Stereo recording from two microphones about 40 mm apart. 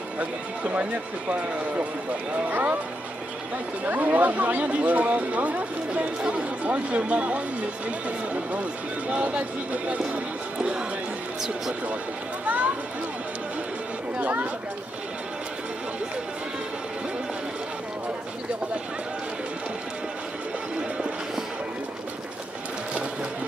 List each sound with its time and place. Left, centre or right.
0.2 s speech: right
2.5 s speech: right
3.8 s speech: right
9.1 s speech: right
12.4 s a sound: right